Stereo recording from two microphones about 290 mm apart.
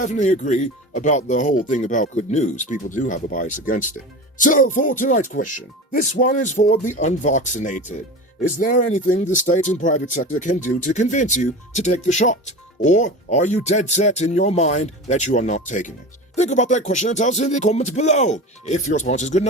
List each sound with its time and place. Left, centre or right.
0.0 s speech: left